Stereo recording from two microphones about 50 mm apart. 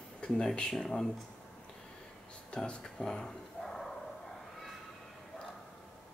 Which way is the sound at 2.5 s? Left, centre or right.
Centre.